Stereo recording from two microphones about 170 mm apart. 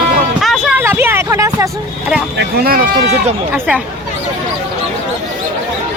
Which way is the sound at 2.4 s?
60° right (ahead or behind).